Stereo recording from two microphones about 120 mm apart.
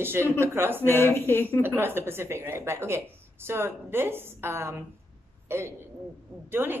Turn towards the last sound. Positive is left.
turn(degrees=-15)  # may be behind; listen again after turning